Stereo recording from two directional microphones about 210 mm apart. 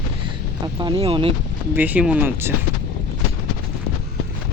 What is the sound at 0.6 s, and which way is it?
Speech, 20° right (ahead or behind).